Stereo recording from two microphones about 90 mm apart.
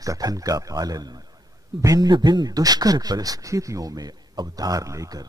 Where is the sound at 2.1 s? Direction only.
50° right (ahead or behind).